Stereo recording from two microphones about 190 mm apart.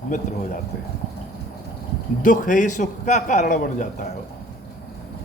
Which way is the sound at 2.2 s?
45° left (ahead or behind).